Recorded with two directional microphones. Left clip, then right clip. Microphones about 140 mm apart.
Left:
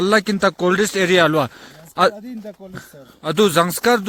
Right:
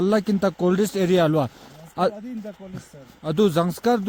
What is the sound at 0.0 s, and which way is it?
Speech, 20° left (ahead or behind).